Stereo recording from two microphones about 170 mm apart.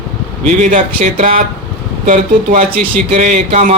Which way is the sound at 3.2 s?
45° right (ahead or behind).